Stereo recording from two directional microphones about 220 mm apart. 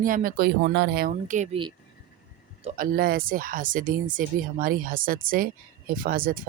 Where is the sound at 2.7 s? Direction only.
40° right (ahead or behind).